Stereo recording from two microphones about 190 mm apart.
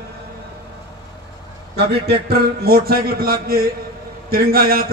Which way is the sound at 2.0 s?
60° right (ahead or behind).